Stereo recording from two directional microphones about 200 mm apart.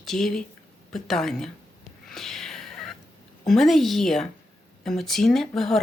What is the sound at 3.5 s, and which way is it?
Speech, centre (ahead or behind).